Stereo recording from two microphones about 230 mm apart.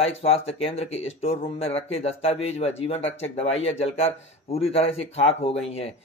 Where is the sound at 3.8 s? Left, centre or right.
Left.